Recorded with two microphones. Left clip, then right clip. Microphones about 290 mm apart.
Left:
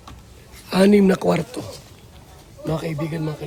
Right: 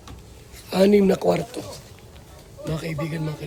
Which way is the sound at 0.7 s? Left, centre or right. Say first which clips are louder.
Left 1 dB; left.